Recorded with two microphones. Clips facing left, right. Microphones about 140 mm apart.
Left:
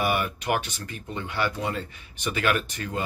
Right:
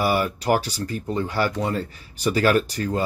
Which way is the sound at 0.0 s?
35° right (ahead or behind).